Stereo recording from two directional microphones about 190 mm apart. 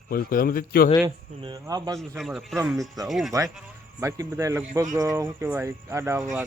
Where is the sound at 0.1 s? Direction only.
50° left (ahead or behind).